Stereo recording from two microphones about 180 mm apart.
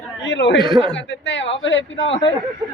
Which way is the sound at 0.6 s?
25° right (ahead or behind).